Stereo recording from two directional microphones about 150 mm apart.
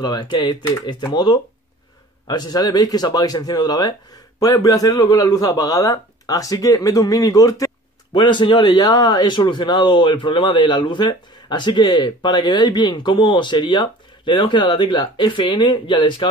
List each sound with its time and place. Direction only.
0.0 s a man's voice: 30° left (ahead or behind)